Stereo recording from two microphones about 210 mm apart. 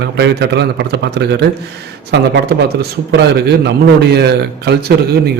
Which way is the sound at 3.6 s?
50° right (ahead or behind).